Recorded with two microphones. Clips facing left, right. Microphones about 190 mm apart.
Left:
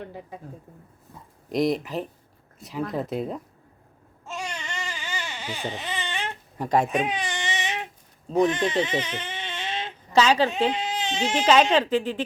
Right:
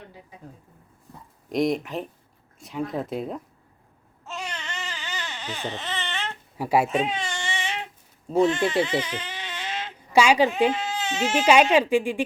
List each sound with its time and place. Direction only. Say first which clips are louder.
1.5 s speech: even; centre (ahead or behind)
4.3 s baby cry: left 1 dB; 15° left (ahead or behind)
6.6 s speech: right 1 dB; 10° right (ahead or behind)
6.8 s baby cry: even; 15° left (ahead or behind)
8.4 s speech: right 1 dB; 15° left (ahead or behind)
9.0 s a sound: even; 20° left (ahead or behind)
10.1 s a woman's voice: right 1 dB; 10° right (ahead or behind)
10.7 s baby cry: right 1 dB; 20° left (ahead or behind)
11.1 s speech: right 1 dB; 5° right (ahead or behind)